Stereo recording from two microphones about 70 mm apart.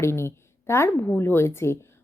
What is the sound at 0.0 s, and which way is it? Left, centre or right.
A woman's voice, left.